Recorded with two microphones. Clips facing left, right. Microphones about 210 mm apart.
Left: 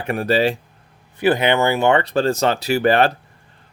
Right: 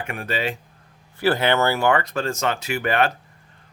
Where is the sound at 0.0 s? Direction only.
35° left (ahead or behind).